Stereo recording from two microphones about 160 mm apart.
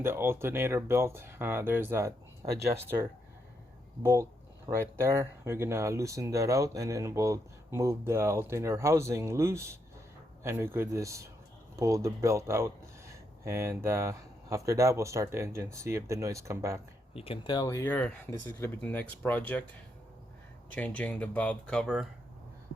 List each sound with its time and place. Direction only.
0.0 s speech: 15° right (ahead or behind)
17.2 s speech: 35° left (ahead or behind)
17.9 s speech: 10° left (ahead or behind)
20.7 s speech: 10° left (ahead or behind)